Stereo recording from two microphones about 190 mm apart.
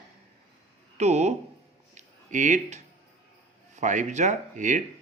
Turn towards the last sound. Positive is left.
turn(degrees=-40)  # may be behind; listen again after turning